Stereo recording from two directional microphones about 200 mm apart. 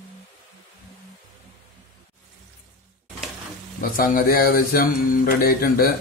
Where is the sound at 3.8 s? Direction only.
45° left (ahead or behind).